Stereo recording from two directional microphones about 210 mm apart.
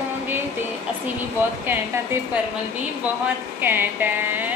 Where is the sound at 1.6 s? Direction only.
10° right (ahead or behind).